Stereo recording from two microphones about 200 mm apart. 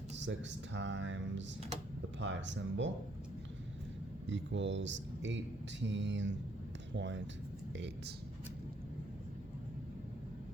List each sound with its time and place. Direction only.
0.2 s speech: 65° right (ahead or behind)
4.3 s speech: 65° right (ahead or behind)